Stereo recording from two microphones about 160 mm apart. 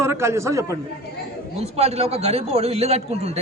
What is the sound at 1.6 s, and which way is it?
A man's voice, 40° right (ahead or behind).